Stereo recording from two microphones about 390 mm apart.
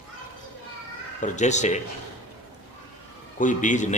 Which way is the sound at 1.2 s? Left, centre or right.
Centre.